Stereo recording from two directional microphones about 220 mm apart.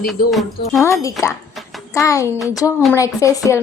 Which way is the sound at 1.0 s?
15° left (ahead or behind).